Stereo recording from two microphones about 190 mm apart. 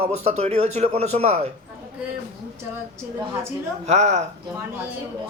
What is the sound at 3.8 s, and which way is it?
Speech, 35° right (ahead or behind).